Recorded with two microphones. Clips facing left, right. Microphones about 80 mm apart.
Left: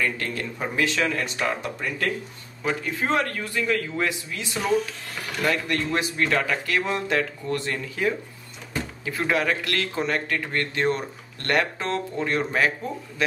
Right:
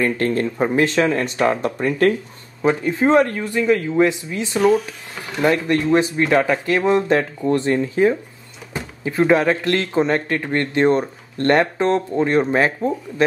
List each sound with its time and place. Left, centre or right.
0.0 s speech: right
2.6 s speech: right
4.6 s speech: centre
5.2 s speech: right